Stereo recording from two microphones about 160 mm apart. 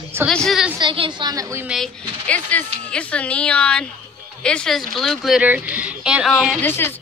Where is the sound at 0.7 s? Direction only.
30° right (ahead or behind).